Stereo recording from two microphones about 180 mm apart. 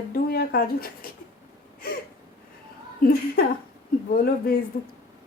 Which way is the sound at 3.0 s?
55° left (ahead or behind).